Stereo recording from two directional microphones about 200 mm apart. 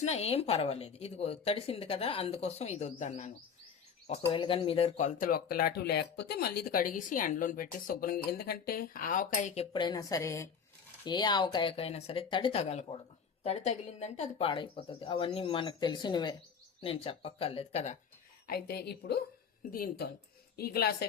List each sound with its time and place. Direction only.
0.0 s speech: 35° left (ahead or behind)
4.3 s a woman's voice: 25° left (ahead or behind)
5.2 s speech: 45° left (ahead or behind)
9.7 s a woman's voice: 20° left (ahead or behind)
18.4 s speech: 50° left (ahead or behind)